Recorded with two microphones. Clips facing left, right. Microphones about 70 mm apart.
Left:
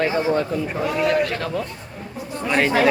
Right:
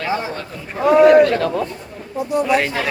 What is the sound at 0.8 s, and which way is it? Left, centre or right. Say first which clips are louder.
Speech: right 12 dB; right.